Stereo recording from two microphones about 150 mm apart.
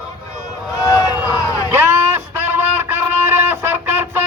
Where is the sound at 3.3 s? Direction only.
15° right (ahead or behind).